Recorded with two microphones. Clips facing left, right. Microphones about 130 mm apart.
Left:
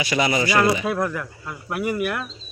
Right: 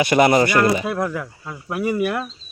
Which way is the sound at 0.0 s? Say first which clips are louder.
Right 7 dB; 55° right (ahead or behind).